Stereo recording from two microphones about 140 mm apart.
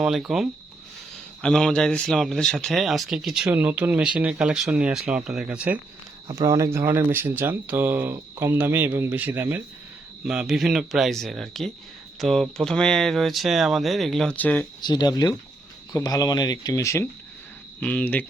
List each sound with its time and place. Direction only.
0.0 s speech: 5° right (ahead or behind)
3.4 s speech: 15° right (ahead or behind)
6.3 s speech: 20° right (ahead or behind)
10.2 s speech: 5° right (ahead or behind)
14.8 s speech: 30° left (ahead or behind); by 18.3 s 10° left (ahead or behind)